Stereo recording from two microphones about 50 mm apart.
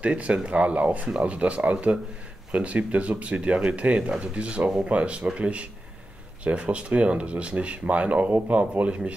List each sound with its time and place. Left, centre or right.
0.0 s speech: right